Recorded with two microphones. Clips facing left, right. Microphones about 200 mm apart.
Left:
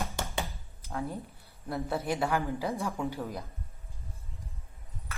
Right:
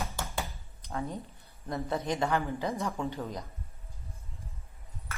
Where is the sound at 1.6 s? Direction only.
10° left (ahead or behind).